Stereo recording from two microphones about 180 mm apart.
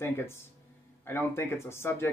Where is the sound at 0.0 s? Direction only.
15° left (ahead or behind).